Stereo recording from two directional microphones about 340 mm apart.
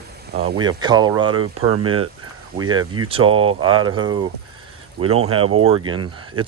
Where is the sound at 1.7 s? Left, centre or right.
Right.